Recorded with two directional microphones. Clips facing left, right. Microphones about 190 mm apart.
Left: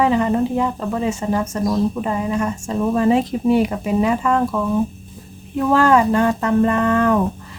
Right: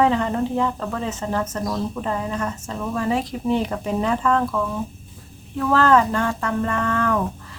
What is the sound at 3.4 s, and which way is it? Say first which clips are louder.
A woman's voice: left 4 dB; 10° left (ahead or behind).